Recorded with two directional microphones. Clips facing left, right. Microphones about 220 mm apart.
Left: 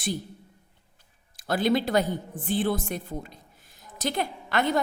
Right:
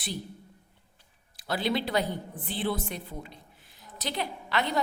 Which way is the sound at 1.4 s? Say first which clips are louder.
Left 5 dB; 45° left (ahead or behind).